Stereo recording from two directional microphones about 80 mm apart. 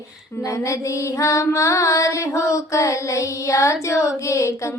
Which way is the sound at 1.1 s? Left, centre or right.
Left.